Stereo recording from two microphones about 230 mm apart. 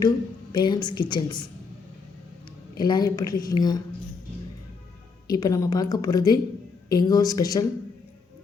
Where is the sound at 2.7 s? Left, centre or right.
Centre.